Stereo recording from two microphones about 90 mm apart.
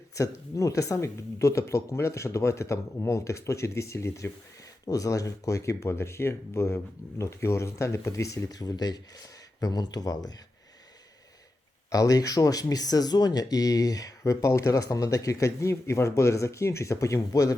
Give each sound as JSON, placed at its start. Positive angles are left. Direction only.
{"t": 0.1, "sound": "speech", "side_deg": 35}
{"t": 11.9, "sound": "speech", "side_deg": 40}